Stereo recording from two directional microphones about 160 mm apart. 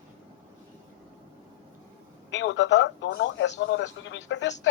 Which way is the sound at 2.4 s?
90° left.